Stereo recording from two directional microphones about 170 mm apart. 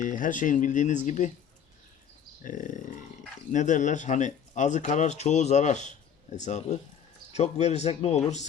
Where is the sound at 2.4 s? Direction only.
50° left (ahead or behind).